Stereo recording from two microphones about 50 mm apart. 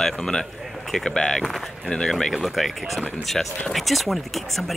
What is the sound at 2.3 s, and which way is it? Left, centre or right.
Speech, centre.